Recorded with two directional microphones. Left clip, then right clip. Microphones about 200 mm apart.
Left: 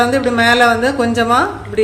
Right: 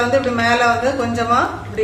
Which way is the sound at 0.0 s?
50° left (ahead or behind).